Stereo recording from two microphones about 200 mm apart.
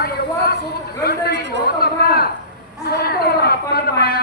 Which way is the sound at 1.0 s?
50° left (ahead or behind).